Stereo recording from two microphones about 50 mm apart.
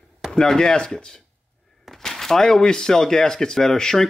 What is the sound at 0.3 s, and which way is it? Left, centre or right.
Speech, centre.